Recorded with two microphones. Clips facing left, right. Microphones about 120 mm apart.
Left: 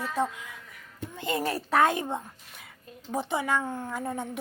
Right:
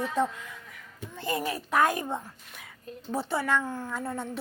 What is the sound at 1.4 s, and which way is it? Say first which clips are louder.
A woman's voice: left 2 dB; 35° left (ahead or behind).